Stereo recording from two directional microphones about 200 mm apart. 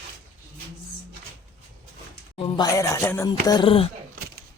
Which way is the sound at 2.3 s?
25° left (ahead or behind).